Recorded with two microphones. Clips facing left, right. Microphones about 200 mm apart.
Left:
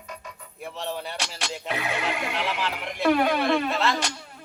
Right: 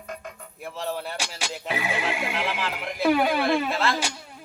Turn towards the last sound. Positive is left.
turn(degrees=0)  # may be behind; listen again after turning